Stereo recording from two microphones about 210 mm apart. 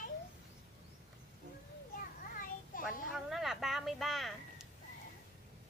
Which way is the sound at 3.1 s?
Centre (ahead or behind).